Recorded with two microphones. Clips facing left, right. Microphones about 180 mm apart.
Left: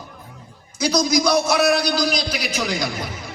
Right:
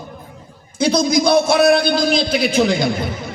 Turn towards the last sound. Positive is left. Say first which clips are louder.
# right 8 dB
turn(degrees=-25)  # may be behind; listen again after turning